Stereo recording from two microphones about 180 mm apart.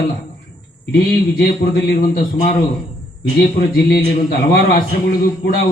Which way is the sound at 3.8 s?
55° left (ahead or behind).